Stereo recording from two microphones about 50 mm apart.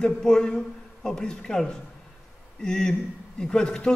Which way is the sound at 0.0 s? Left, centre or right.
Centre.